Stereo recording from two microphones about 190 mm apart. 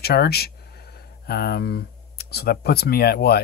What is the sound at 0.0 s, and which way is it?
Speech, 55° left (ahead or behind).